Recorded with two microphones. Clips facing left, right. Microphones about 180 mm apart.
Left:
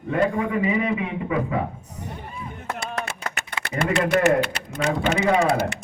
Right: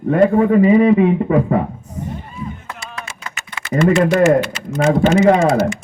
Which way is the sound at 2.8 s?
55° left (ahead or behind).